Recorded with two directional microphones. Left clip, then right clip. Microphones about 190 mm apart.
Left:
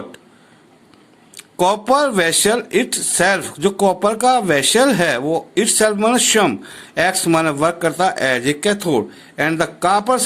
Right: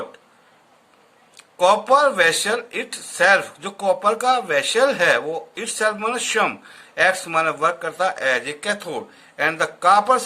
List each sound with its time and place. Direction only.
1.4 s speech: 45° left (ahead or behind)